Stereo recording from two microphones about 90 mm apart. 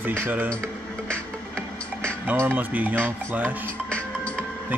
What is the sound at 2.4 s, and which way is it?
Speech, 20° right (ahead or behind).